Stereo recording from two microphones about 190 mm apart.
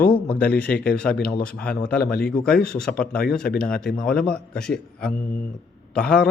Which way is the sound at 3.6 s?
5° left (ahead or behind).